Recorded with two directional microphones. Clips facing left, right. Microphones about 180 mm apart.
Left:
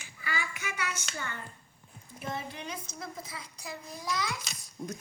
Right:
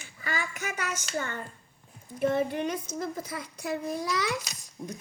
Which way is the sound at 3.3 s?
65° right (ahead or behind).